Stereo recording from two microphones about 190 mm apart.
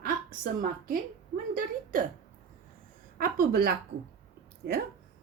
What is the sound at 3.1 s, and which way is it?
A woman's voice, 50° right (ahead or behind).